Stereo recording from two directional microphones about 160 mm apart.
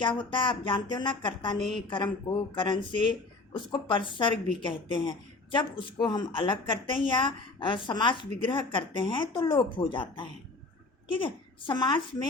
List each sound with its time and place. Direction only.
0.0 s speech: 30° left (ahead or behind)
1.5 s a woman's voice: centre (ahead or behind)
2.6 s speech: 30° left (ahead or behind)